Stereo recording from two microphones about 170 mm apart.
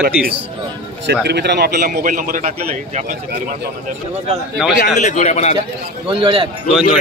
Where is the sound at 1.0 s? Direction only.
80° right.